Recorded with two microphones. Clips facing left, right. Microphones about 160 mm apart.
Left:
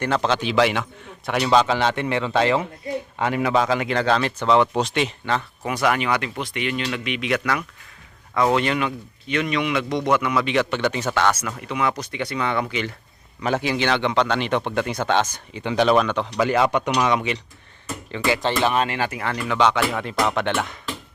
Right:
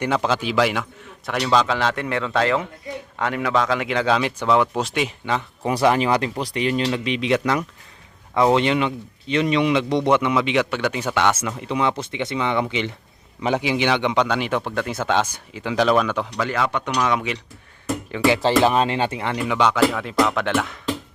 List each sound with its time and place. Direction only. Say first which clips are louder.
0.0 s a man's voice: even; 10° right (ahead or behind)
5.6 s a man's voice: right 4 dB; 30° right (ahead or behind); by 11.3 s 10° right (ahead or behind)
11.3 s a man's voice: right 1 dB; 25° right (ahead or behind); by 16.2 s 5° right (ahead or behind)
16.4 s speech: left 6 dB; 15° left (ahead or behind)
17.1 s a man's voice: left 1 dB; centre (ahead or behind)
18.4 s a man's voice: right 3 dB; 30° right (ahead or behind); by 20.7 s centre (ahead or behind)